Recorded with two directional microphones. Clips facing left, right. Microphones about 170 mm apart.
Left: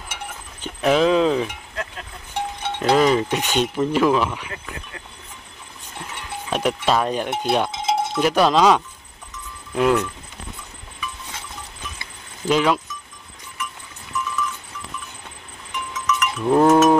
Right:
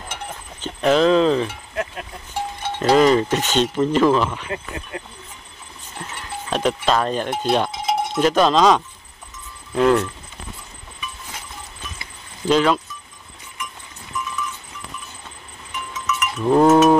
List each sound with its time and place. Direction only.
0.1 s a sound: 10° left (ahead or behind)
2.9 s speech: 5° left (ahead or behind)
5.9 s a sound: 10° left (ahead or behind)
6.9 s speech: 10° left (ahead or behind)
7.7 s cowbell: 25° left (ahead or behind)
8.2 s speech: 10° left (ahead or behind)
12.4 s speech: 10° left (ahead or behind)
15.9 s livestock: 5° right (ahead or behind)